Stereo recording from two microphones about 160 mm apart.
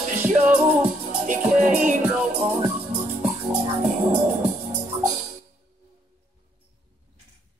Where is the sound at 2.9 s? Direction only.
45° right (ahead or behind).